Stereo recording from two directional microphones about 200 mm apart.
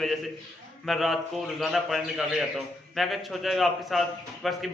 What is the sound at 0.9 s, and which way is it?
A man's voice, centre (ahead or behind).